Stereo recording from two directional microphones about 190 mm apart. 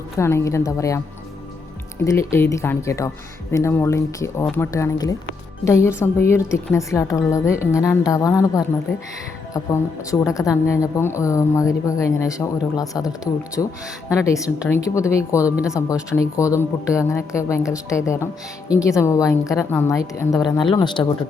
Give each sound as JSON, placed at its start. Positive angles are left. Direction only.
{"t": 0.2, "sound": "a woman's voice", "side_deg": 15}
{"t": 2.0, "sound": "a woman's voice", "side_deg": 15}
{"t": 10.1, "sound": "a woman's voice", "side_deg": 15}
{"t": 13.6, "sound": "a woman's voice", "side_deg": 10}